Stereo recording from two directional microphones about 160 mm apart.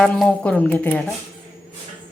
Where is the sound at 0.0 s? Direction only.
5° left (ahead or behind).